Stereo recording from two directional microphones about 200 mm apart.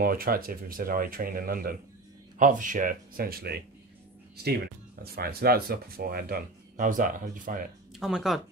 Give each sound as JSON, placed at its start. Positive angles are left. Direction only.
{"t": 0.0, "sound": "speech", "side_deg": -45}
{"t": 5.0, "sound": "speech", "side_deg": -50}
{"t": 7.9, "sound": "speech", "side_deg": 0}